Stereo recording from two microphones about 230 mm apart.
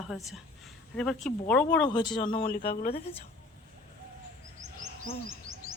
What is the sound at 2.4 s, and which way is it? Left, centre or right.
Speech, left.